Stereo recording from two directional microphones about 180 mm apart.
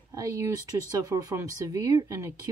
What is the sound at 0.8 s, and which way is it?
Speech, 20° right (ahead or behind).